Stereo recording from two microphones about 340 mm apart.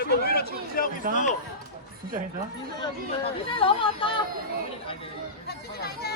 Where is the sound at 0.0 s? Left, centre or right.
Left.